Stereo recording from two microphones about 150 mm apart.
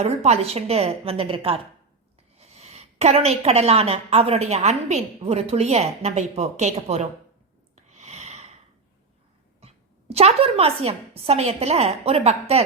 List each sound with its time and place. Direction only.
0.0 s a woman's voice: 45° right (ahead or behind)
7.9 s a sound: 50° right (ahead or behind)
9.6 s a woman's voice: 45° right (ahead or behind)